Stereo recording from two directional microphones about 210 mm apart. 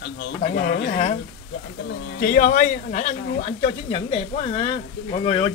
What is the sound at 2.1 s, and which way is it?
Speech, 45° left (ahead or behind).